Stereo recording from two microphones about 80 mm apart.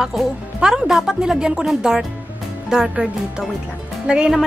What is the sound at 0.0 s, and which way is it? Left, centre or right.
Speech, centre.